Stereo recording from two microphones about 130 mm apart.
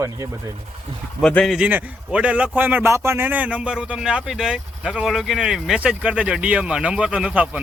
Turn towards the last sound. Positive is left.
turn(degrees=-10)  # may be behind; listen again after turning